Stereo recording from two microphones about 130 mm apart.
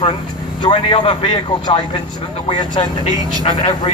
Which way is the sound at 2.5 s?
35° left (ahead or behind).